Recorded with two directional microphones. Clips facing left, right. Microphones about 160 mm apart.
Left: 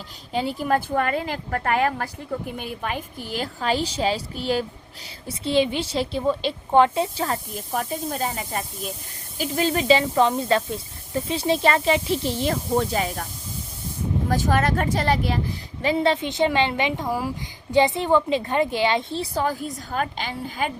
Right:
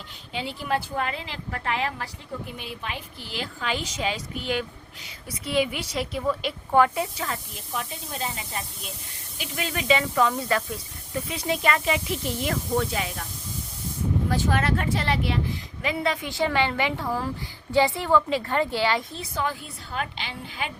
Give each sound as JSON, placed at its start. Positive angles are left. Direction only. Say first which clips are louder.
{"t": 0.3, "sound": "a woman's voice", "louder": "left 5 dB", "side_deg": 45}
{"t": 14.3, "sound": "a woman's voice", "louder": "left 4 dB", "side_deg": 45}